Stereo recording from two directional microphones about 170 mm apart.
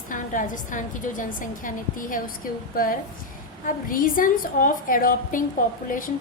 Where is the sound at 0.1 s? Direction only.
50° left (ahead or behind).